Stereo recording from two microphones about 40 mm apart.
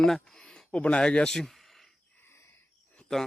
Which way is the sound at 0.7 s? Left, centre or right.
Left.